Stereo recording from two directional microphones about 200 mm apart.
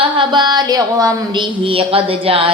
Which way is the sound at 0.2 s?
20° right (ahead or behind).